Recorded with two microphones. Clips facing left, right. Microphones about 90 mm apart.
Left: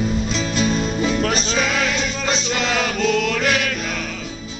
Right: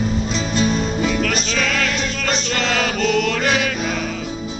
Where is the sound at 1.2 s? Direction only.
30° left (ahead or behind).